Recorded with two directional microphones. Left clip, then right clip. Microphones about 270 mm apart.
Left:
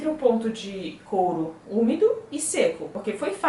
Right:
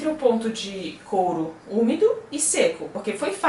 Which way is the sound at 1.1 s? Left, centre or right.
Left.